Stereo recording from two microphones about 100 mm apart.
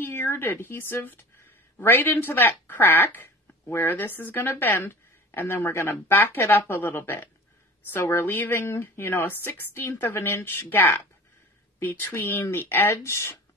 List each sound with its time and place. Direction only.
0.0 s speech: 20° left (ahead or behind)